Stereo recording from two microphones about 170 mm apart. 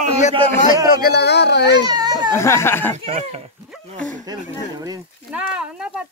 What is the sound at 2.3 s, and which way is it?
Speech, 15° left (ahead or behind).